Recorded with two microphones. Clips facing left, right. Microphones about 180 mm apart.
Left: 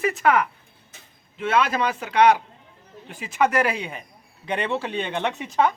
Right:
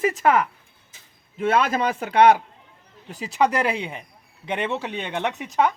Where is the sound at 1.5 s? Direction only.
45° right (ahead or behind).